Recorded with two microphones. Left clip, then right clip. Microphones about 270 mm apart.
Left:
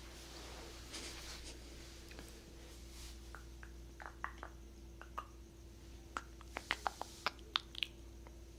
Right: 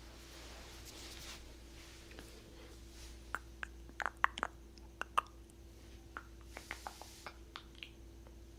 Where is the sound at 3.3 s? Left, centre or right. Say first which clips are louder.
Right 11 dB; right.